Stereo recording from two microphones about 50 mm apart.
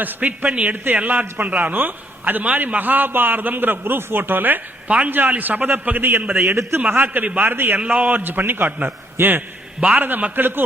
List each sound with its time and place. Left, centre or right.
0.0 s a man's voice: right
4.9 s a man's voice: right
5.1 s a man's voice: right
6.6 s a man's voice: right
6.9 s a man's voice: right
7.9 s a man's voice: right